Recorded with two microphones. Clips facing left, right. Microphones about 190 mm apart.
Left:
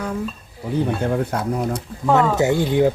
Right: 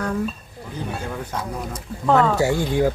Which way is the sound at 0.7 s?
60° left (ahead or behind).